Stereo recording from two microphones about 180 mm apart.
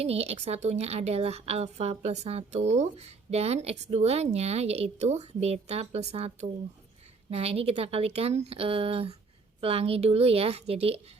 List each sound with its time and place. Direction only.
0.0 s a woman's voice: 35° right (ahead or behind)